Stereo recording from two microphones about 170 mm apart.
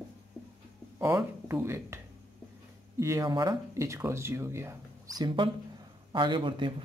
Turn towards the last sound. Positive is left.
turn(degrees=-30)  # may be behind; listen again after turning